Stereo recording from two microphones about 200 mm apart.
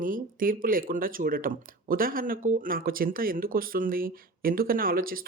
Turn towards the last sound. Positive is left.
turn(degrees=-45)  # may be behind; listen again after turning